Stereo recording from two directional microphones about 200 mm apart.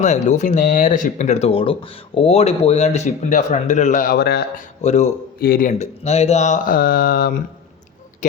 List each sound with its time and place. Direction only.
0.0 s speech: 35° left (ahead or behind); by 4.6 s 55° left (ahead or behind)
4.8 s speech: 35° left (ahead or behind)
5.4 s speech: 45° left (ahead or behind)